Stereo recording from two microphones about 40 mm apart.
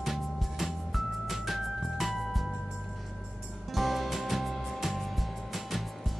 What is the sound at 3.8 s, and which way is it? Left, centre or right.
Music, centre.